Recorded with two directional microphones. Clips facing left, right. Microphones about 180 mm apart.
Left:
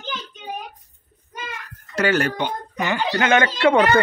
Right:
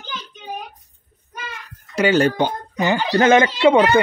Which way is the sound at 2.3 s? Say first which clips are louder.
Right 4 dB; 35° right (ahead or behind).